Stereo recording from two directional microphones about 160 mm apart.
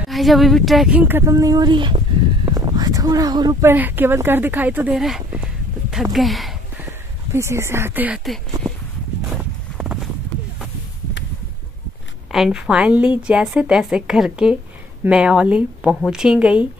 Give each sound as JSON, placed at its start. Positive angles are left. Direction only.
{"t": 0.1, "sound": "speech", "side_deg": 0}
{"t": 2.4, "sound": "a sound", "side_deg": -25}
{"t": 3.6, "sound": "a woman's voice", "side_deg": -10}
{"t": 6.9, "sound": "speech", "side_deg": -15}
{"t": 9.4, "sound": "vehicle", "side_deg": -10}
{"t": 12.3, "sound": "a woman's voice", "side_deg": 0}